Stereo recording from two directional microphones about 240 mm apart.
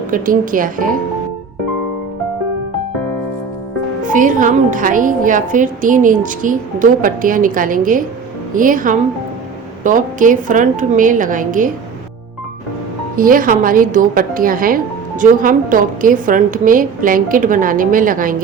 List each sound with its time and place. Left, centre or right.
0.1 s speech: right
4.0 s speech: right
13.1 s speech: right